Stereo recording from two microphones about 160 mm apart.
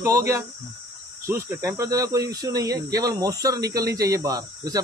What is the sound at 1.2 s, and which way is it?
Speech, 15° right (ahead or behind).